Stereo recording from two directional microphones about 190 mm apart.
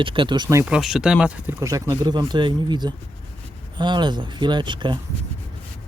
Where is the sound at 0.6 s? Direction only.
5° right (ahead or behind); by 5.0 s 25° right (ahead or behind).